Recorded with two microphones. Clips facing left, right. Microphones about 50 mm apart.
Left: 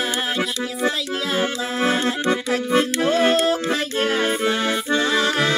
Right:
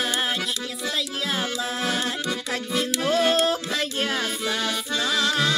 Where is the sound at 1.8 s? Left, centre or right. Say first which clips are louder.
Left 9 dB; centre.